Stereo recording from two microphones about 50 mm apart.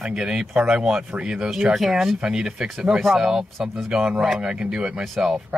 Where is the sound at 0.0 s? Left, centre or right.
Centre.